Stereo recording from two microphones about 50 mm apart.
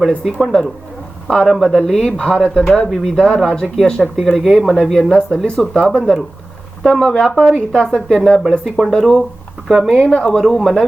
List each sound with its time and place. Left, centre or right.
0.3 s speech: centre
8.6 s speech: centre
8.9 s speech: centre
9.9 s speech: centre
10.3 s speech: centre